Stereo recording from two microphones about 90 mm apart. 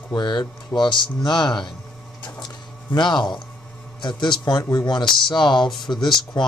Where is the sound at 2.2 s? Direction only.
50° left (ahead or behind).